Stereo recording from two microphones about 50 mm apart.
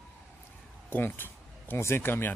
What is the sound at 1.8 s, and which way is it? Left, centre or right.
Speech, left.